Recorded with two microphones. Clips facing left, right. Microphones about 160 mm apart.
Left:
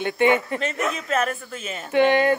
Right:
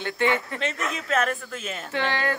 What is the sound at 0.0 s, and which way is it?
Speech, 15° left (ahead or behind).